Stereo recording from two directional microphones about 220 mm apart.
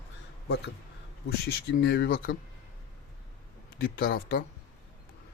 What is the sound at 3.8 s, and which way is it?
Speech, 45° left (ahead or behind).